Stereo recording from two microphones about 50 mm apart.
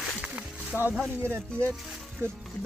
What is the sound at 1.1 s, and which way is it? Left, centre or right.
Speech, right.